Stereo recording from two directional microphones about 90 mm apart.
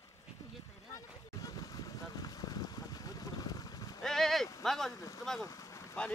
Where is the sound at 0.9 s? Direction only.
45° left (ahead or behind).